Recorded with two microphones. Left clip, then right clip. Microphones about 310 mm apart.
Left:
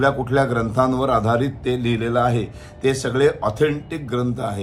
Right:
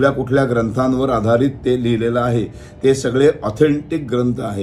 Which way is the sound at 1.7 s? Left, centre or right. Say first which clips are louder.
Right 3 dB; left.